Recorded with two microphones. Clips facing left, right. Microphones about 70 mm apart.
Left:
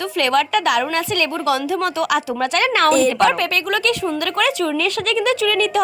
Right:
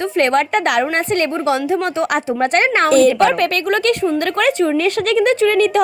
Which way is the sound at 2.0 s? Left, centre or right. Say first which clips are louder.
Right 2 dB; right.